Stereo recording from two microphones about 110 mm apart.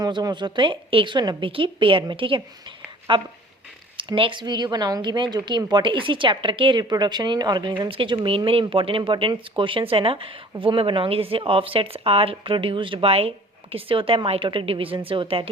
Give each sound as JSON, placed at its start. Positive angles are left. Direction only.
{"t": 0.0, "sound": "speech", "side_deg": -35}
{"t": 7.9, "sound": "speech", "side_deg": -50}